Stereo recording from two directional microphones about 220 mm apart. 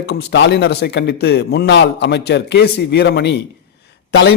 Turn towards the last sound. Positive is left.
turn(degrees=50)  # may be behind; listen again after turning